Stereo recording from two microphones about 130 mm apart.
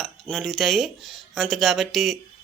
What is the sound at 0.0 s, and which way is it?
Speech, centre (ahead or behind).